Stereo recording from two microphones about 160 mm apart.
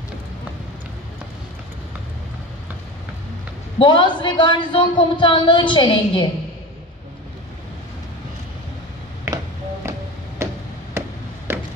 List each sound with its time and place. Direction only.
3.7 s a woman's voice: 30° left (ahead or behind)
9.3 s music: 20° right (ahead or behind)
10.4 s a sound: 15° right (ahead or behind)